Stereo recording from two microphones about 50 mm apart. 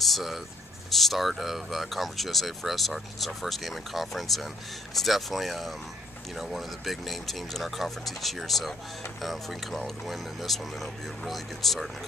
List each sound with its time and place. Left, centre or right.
0.0 s speech: centre